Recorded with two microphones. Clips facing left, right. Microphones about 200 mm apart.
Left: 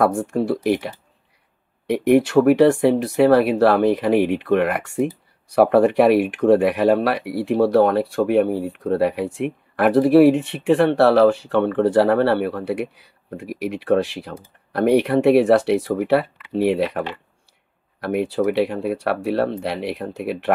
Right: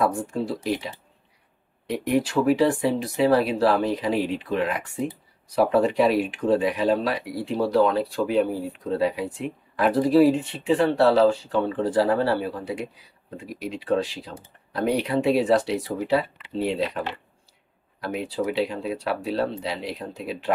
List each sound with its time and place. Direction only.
0.0 s speech: 65° left (ahead or behind)
18.0 s speech: 60° left (ahead or behind)